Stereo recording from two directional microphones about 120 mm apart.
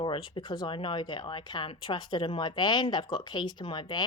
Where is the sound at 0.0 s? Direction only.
40° left (ahead or behind).